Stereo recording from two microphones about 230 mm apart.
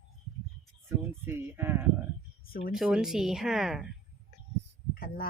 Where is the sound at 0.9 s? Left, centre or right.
Centre.